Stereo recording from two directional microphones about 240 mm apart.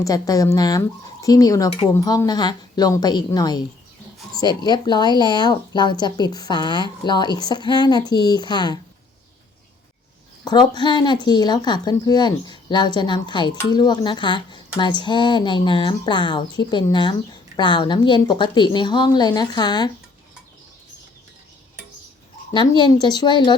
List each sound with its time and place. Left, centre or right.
0.0 s speech: centre
10.4 s a woman's voice: centre
22.5 s a woman's voice: centre